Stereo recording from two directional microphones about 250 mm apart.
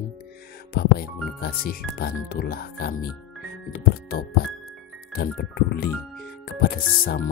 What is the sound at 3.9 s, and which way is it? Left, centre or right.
Speech, left.